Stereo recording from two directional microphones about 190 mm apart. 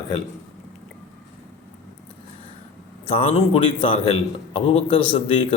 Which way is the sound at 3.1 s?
30° left (ahead or behind).